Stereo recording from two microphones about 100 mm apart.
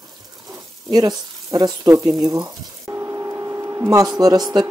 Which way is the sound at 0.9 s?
40° right (ahead or behind).